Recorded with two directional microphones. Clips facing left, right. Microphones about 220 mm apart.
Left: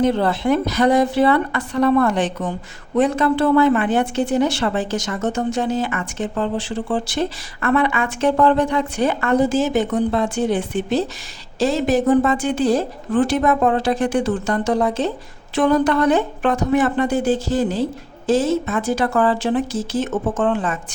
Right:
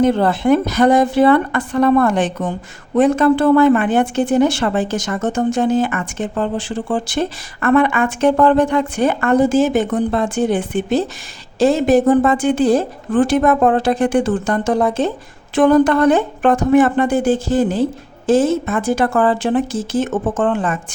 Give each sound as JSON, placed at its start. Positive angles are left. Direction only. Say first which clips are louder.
{"t": 0.0, "sound": "a woman's voice", "louder": "right 3 dB", "side_deg": -50}